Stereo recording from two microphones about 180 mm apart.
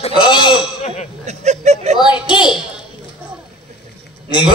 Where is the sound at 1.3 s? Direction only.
40° right (ahead or behind).